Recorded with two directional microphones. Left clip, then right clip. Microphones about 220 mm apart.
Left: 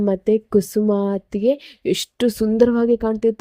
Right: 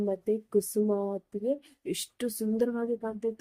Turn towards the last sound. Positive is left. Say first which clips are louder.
# left 14 dB
turn(degrees=35)  # may be behind; listen again after turning